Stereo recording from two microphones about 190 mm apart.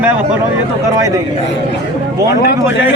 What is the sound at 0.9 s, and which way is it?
Speech, 15° right (ahead or behind).